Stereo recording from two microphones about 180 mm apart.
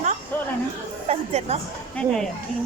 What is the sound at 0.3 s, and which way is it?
Chatter, 10° left (ahead or behind).